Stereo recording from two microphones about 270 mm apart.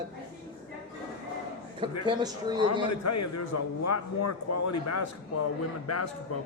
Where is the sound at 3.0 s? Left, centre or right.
Left.